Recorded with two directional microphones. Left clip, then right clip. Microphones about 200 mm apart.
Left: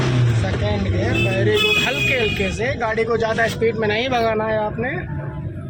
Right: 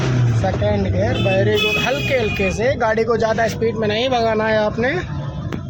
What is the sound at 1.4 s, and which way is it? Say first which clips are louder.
Speech: left 1 dB; 25° right (ahead or behind).